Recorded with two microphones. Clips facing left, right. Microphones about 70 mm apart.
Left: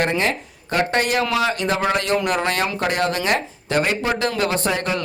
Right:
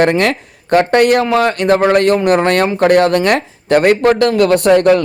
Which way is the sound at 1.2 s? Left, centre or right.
Right.